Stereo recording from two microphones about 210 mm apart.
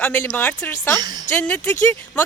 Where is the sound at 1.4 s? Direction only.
5° left (ahead or behind).